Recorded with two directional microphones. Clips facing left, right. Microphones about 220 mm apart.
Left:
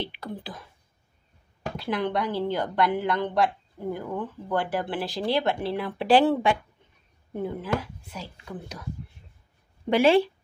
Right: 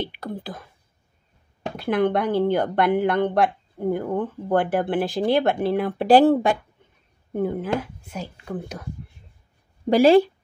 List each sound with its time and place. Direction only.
0.0 s speech: 45° right (ahead or behind)
1.8 s speech: 55° right (ahead or behind)
9.8 s speech: 40° right (ahead or behind)